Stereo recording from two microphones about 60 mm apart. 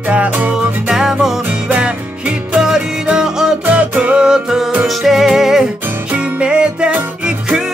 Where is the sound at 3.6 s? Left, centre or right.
Right; by 5.6 s centre.